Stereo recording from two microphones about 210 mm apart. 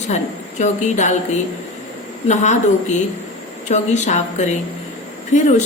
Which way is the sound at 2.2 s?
35° left (ahead or behind).